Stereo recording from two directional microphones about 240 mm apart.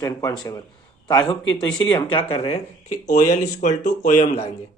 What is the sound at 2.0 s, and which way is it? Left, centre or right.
Speech, left.